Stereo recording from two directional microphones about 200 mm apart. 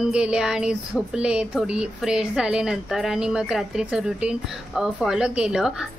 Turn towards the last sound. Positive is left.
turn(degrees=0)  # may be behind; listen again after turning